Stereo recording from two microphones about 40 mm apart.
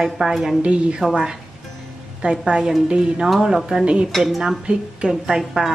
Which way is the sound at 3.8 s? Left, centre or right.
Right.